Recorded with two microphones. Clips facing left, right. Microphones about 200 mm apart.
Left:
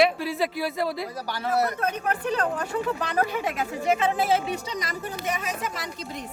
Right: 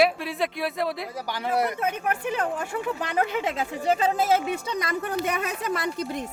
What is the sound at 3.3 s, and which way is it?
Speech, 25° right (ahead or behind).